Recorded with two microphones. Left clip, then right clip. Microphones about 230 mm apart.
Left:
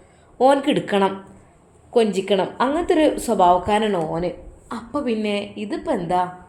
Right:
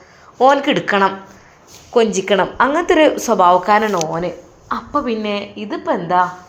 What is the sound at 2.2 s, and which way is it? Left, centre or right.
A woman's voice, centre.